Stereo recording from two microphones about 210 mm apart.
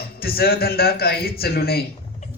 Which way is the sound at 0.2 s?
45° left (ahead or behind).